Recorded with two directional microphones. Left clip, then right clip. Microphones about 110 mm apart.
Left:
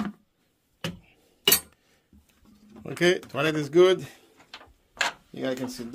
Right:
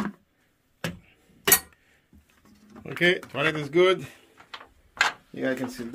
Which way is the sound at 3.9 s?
35° left (ahead or behind).